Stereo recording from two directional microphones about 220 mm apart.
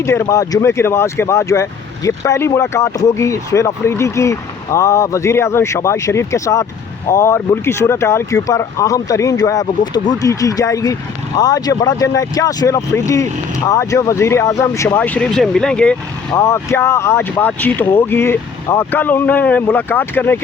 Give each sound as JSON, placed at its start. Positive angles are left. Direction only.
{"t": 0.0, "sound": "speech", "side_deg": 10}